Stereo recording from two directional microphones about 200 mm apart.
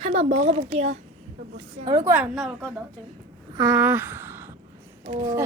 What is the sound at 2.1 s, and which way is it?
Speech, 5° right (ahead or behind).